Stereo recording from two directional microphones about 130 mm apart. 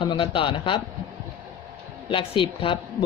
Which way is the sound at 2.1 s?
45° left (ahead or behind).